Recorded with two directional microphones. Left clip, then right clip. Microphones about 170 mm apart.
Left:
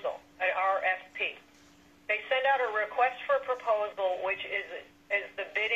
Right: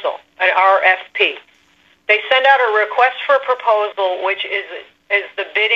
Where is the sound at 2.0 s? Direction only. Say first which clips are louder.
Right 15 dB; 70° right (ahead or behind).